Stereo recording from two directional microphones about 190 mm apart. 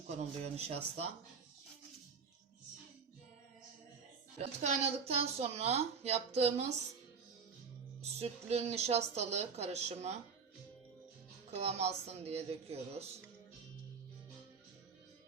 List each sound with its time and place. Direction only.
0.2 s speech: 35° right (ahead or behind)
4.4 s speech: 35° right (ahead or behind)
8.0 s speech: 35° right (ahead or behind)
11.5 s speech: 35° right (ahead or behind)